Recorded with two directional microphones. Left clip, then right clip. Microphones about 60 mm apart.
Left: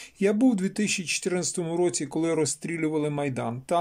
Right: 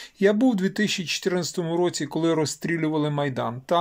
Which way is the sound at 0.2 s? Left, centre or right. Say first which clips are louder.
Right 3 dB; left.